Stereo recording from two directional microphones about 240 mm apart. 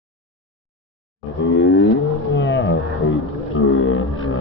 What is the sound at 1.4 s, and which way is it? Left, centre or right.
Livestock, left.